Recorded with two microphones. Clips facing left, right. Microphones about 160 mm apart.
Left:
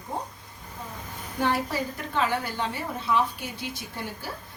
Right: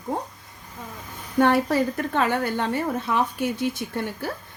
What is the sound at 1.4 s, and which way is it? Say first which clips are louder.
A woman's voice: right 7 dB; 60° right (ahead or behind).